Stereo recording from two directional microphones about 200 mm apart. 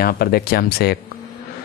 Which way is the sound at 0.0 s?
50° left (ahead or behind).